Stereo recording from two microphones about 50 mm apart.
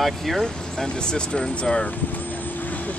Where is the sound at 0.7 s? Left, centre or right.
Centre.